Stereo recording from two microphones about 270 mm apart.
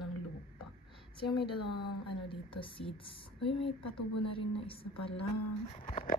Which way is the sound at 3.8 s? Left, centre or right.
Left.